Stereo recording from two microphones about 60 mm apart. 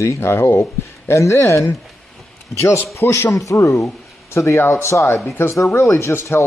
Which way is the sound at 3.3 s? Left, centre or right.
Left.